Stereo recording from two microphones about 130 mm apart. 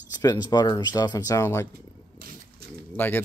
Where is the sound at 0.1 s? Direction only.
30° left (ahead or behind).